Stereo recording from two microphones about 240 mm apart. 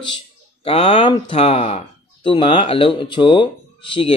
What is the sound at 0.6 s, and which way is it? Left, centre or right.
Speech, left.